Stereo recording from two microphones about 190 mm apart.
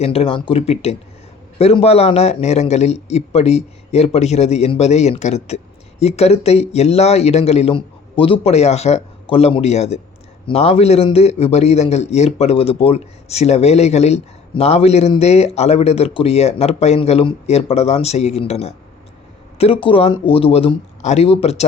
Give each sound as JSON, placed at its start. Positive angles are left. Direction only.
{"t": 0.0, "sound": "a man's voice", "side_deg": 30}